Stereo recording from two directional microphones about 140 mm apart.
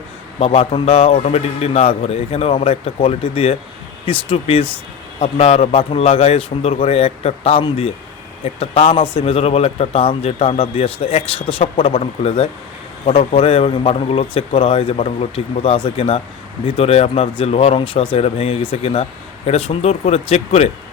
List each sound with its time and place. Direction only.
0.3 s a man's voice: 45° left (ahead or behind)